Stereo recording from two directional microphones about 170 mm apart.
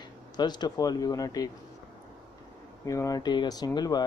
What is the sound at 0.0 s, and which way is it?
Speech, 25° left (ahead or behind).